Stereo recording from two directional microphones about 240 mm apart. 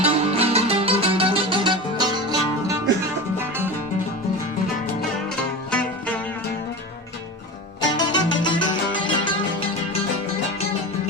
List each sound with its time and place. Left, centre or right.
0.0 s music: right
7.8 s music: centre